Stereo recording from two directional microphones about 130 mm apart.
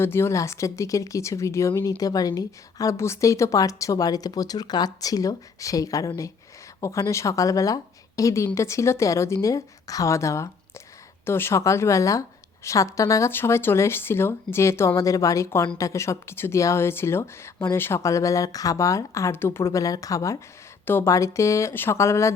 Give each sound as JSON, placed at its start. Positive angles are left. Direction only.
{"t": 0.0, "sound": "speech", "side_deg": 20}